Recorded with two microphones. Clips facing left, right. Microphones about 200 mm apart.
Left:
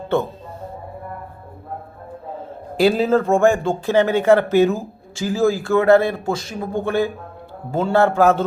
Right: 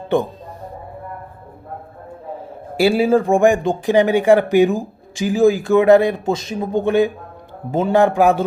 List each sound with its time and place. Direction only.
0.1 s speech: 15° right (ahead or behind)
2.7 s speech: 10° right (ahead or behind)